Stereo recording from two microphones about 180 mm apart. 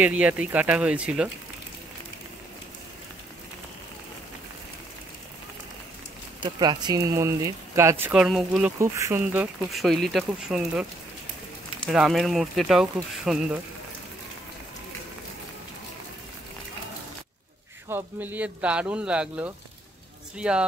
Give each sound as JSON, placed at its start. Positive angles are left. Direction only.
{"t": 0.0, "sound": "speech", "side_deg": -10}
{"t": 6.4, "sound": "speech", "side_deg": -25}
{"t": 8.7, "sound": "speech", "side_deg": -15}
{"t": 17.8, "sound": "speech", "side_deg": -10}